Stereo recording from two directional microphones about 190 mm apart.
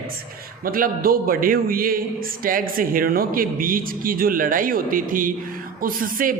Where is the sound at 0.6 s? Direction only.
50° right (ahead or behind).